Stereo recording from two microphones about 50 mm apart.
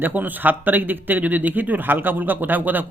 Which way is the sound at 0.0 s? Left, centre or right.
Right.